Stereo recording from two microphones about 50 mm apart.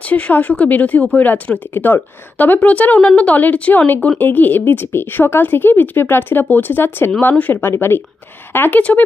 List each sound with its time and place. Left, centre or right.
0.0 s a woman's voice: left
7.2 s speech: left
7.6 s speech: left
8.5 s speech: left